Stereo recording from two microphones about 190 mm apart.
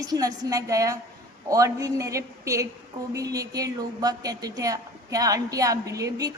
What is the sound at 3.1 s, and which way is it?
A woman's voice, 20° right (ahead or behind).